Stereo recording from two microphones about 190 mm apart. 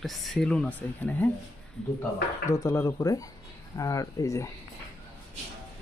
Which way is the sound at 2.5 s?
15° left (ahead or behind).